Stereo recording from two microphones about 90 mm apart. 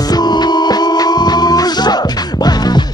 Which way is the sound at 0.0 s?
50° left (ahead or behind).